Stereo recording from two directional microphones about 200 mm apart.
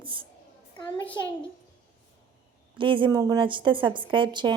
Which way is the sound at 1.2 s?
20° left (ahead or behind).